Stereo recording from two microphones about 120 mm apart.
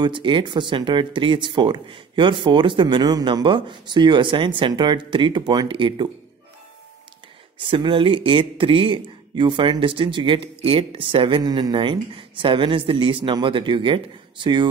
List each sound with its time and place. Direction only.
0.0 s speech: 40° right (ahead or behind)
7.6 s speech: 45° right (ahead or behind)